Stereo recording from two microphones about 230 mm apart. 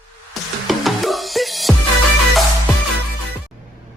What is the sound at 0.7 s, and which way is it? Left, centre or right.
Music, centre.